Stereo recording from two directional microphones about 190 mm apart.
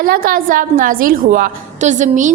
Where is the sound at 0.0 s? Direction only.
50° right (ahead or behind).